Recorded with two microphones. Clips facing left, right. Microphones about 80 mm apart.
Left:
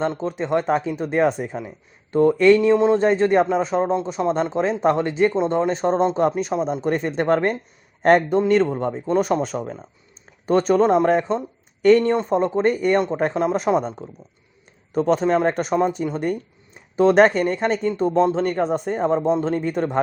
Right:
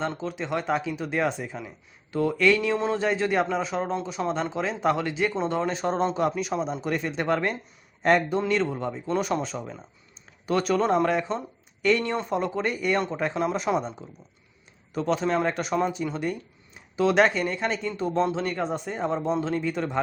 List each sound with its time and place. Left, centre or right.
0.2 s speech: left
10.4 s speech: left
14.9 s speech: left